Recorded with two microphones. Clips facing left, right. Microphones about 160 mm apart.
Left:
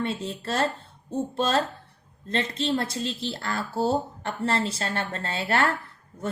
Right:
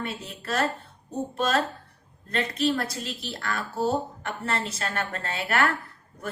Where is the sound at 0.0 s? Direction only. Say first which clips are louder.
Left 5 dB; 30° left (ahead or behind).